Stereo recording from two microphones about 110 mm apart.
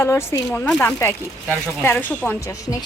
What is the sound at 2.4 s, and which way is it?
Speech, 30° left (ahead or behind).